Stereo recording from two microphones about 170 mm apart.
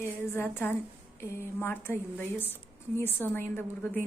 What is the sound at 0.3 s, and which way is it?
A woman's voice, 15° left (ahead or behind).